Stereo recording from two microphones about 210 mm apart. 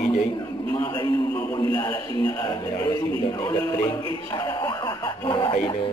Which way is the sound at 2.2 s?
10° left (ahead or behind).